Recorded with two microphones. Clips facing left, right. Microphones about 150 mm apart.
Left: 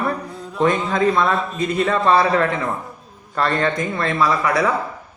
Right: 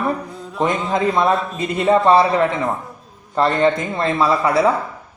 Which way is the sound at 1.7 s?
20° right (ahead or behind).